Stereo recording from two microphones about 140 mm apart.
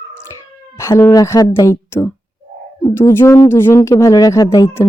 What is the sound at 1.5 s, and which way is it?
Speech, 20° left (ahead or behind).